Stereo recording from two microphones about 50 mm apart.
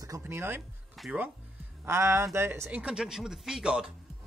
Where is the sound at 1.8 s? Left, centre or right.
Right.